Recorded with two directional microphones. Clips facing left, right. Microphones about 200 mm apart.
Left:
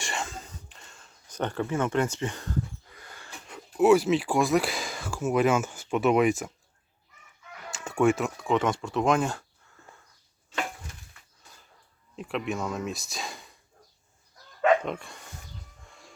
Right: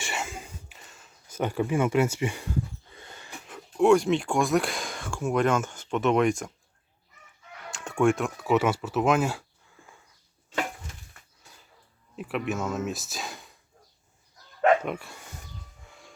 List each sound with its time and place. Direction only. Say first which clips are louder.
0.0 s a sound: even; 5° right (ahead or behind)
2.9 s a sound: right 2 dB; 25° right (ahead or behind)
3.4 s speech: even; centre (ahead or behind)
7.7 s speech: even; centre (ahead or behind)
12.1 s speech: right 1 dB; 5° right (ahead or behind)
14.8 s dog: right 1 dB; 5° right (ahead or behind)
15.9 s music: right 1 dB; centre (ahead or behind)